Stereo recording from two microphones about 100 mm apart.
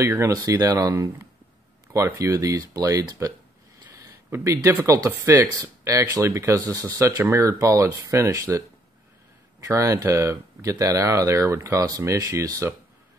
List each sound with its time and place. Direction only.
0.0 s speech: 30° right (ahead or behind)
4.3 s speech: 25° right (ahead or behind)